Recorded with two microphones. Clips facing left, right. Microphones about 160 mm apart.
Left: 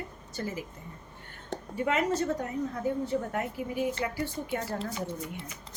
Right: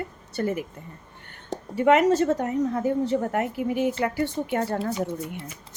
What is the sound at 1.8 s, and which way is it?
A woman's voice, 75° right (ahead or behind).